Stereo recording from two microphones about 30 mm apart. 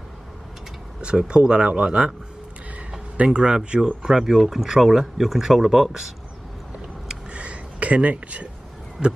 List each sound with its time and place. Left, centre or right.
1.0 s speech: right
3.3 s speech: right
4.1 s speech: centre
7.2 s a sound: right
9.0 s speech: centre